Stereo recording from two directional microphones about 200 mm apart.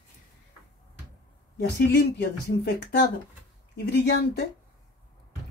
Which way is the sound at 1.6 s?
55° left (ahead or behind).